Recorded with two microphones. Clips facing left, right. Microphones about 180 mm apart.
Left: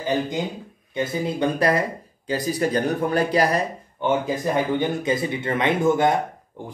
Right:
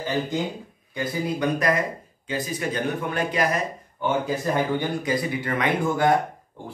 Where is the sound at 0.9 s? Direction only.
25° left (ahead or behind).